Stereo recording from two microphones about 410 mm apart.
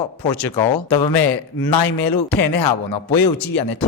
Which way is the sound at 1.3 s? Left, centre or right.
Left.